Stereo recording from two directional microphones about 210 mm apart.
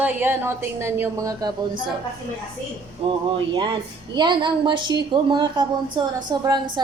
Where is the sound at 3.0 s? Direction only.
25° right (ahead or behind).